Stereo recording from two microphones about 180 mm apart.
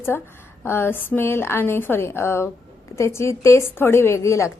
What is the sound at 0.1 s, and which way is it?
A woman's voice, 15° left (ahead or behind).